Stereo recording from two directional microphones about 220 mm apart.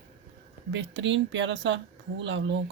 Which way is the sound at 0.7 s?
55° right (ahead or behind).